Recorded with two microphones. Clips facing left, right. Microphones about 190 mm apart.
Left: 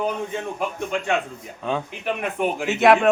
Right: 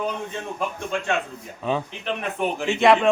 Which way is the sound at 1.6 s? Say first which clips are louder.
Right 1 dB; centre (ahead or behind).